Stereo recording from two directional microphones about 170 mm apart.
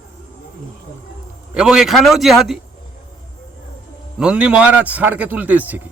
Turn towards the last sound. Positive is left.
turn(degrees=-10)  # may be behind; listen again after turning